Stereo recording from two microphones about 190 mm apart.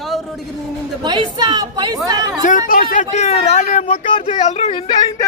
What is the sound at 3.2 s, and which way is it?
Speech, 35° left (ahead or behind).